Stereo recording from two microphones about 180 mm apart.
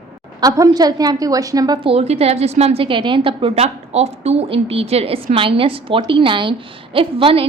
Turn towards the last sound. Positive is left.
turn(degrees=-30)  # may be behind; listen again after turning